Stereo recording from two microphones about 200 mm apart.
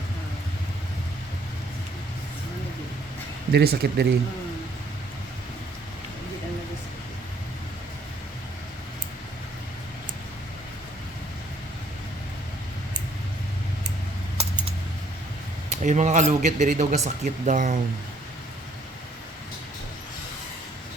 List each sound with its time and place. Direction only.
3.5 s speech: 55° right (ahead or behind)
14.3 s keys jangling: 25° right (ahead or behind)
15.7 s speech: 35° right (ahead or behind)